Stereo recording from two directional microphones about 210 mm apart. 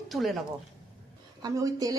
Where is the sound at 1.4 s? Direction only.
15° right (ahead or behind).